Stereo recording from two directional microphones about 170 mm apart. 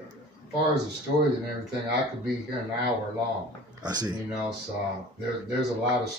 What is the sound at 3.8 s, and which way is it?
Speech, 25° right (ahead or behind).